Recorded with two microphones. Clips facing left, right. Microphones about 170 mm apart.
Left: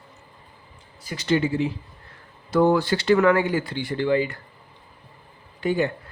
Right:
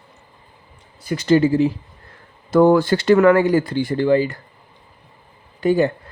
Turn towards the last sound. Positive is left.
turn(degrees=-40)  # may be behind; listen again after turning